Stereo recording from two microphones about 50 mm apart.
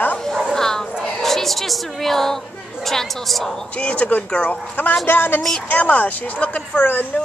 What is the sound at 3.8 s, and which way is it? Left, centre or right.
Speech, left.